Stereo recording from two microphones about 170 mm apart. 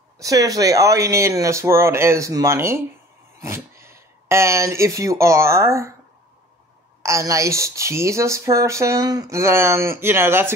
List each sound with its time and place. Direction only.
0.2 s speech: 20° right (ahead or behind)
7.0 s speech: 20° right (ahead or behind)